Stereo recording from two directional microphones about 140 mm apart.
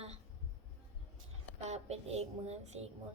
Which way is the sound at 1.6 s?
50° right (ahead or behind).